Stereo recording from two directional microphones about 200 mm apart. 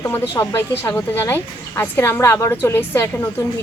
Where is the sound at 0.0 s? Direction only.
10° left (ahead or behind).